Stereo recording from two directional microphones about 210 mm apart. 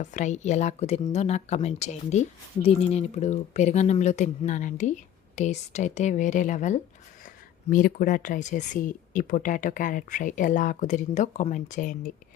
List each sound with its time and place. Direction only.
0.0 s speech: 35° left (ahead or behind)